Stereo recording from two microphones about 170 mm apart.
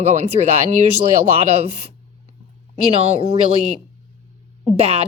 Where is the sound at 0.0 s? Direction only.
40° right (ahead or behind).